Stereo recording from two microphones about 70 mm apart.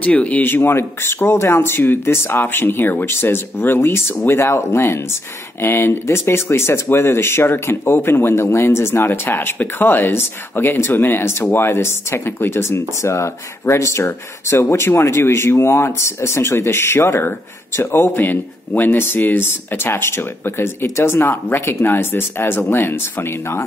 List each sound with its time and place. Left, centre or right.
0.0 s speech: left